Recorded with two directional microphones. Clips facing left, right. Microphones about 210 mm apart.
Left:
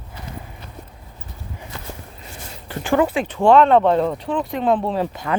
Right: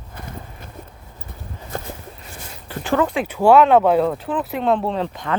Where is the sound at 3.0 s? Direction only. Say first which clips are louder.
Left 1 dB; 5° left (ahead or behind).